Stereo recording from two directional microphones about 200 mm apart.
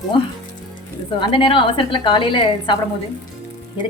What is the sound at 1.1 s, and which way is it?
A woman's voice, 25° left (ahead or behind).